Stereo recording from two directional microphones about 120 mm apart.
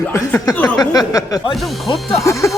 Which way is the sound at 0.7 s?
35° left (ahead or behind).